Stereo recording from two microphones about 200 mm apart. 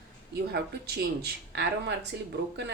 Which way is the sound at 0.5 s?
55° right (ahead or behind).